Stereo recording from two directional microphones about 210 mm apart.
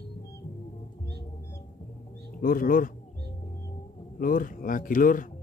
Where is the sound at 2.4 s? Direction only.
40° left (ahead or behind).